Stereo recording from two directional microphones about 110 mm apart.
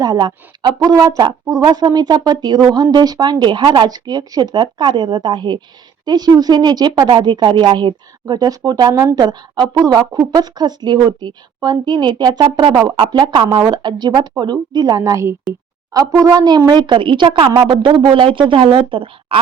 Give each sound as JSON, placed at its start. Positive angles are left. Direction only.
{"t": 0.0, "sound": "speech", "side_deg": -40}